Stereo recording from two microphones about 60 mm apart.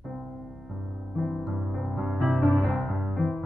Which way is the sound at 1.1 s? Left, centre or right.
Centre.